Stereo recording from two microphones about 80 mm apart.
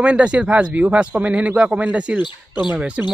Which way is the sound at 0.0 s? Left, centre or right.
Centre.